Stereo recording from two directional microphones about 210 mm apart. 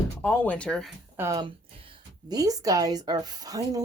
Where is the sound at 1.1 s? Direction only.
15° right (ahead or behind).